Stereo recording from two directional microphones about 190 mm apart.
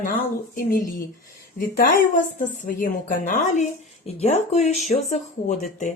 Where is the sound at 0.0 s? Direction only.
45° left (ahead or behind).